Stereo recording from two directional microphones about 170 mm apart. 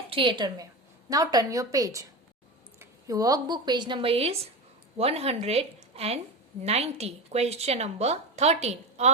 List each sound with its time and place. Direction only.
0.1 s a woman's voice: 30° right (ahead or behind)